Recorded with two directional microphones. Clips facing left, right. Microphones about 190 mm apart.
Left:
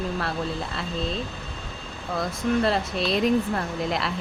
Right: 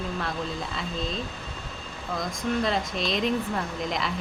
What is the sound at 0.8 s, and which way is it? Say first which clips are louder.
Speech: left 2 dB; centre (ahead or behind).